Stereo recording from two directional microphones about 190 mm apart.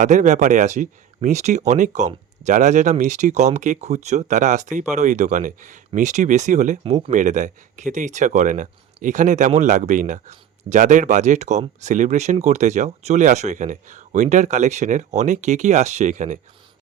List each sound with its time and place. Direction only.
0.0 s speech: 40° right (ahead or behind)